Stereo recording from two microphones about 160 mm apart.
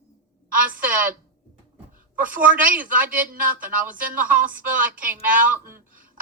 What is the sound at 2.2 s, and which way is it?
Speech, 60° right (ahead or behind).